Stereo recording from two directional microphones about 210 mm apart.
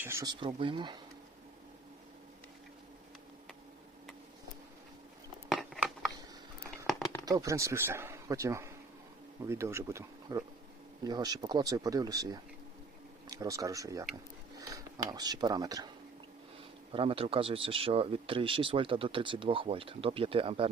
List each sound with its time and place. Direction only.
0.0 s speech: 10° right (ahead or behind)
0.3 s speech: 25° right (ahead or behind)
5.5 s a sound: centre (ahead or behind)
7.0 s a sound: 15° left (ahead or behind)
7.3 s speech: 15° right (ahead or behind)
16.9 s speech: 25° right (ahead or behind)